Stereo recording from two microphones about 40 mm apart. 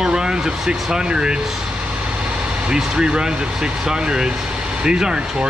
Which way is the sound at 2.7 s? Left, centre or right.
Centre.